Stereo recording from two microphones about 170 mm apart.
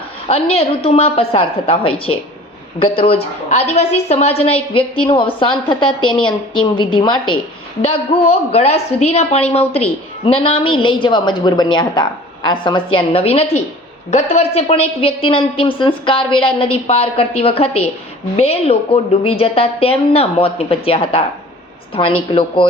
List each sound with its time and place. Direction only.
0.3 s a woman's voice: 35° left (ahead or behind)
7.8 s a woman's voice: 35° left (ahead or behind)